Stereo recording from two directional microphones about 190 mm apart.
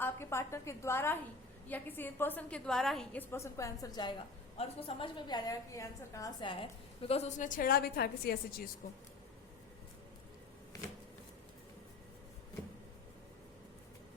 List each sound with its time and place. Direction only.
0.0 s a woman's voice: 15° left (ahead or behind); by 8.6 s 50° left (ahead or behind)